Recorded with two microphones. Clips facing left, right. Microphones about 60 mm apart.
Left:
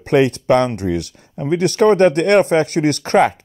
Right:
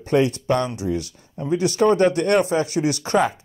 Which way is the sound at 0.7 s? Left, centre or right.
Left.